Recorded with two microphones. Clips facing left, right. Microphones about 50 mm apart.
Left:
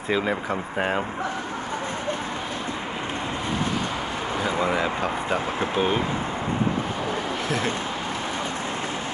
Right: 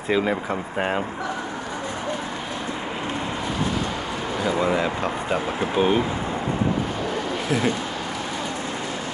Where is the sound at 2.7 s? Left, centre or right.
Centre.